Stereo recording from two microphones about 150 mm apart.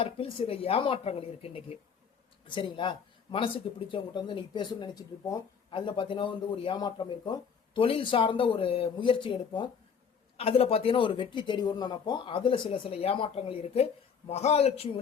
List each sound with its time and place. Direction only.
0.0 s a man's voice: 40° left (ahead or behind)